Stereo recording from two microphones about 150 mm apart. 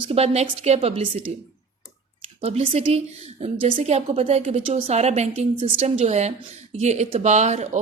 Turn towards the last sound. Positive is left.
turn(degrees=-50)  # may be behind; listen again after turning